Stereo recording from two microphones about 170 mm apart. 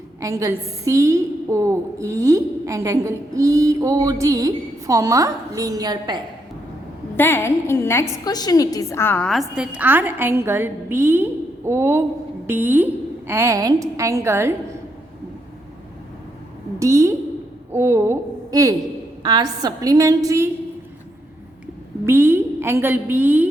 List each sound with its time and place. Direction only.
0.2 s a woman's voice: 20° right (ahead or behind)
7.2 s a woman's voice: 15° left (ahead or behind); by 14.8 s 15° right (ahead or behind)
16.8 s a sound: 20° right (ahead or behind)
19.2 s a woman's voice: 25° right (ahead or behind)
22.0 s a woman's voice: 15° right (ahead or behind)